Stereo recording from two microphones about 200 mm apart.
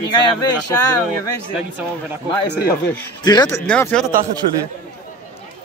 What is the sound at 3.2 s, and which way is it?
Speech, 20° left (ahead or behind).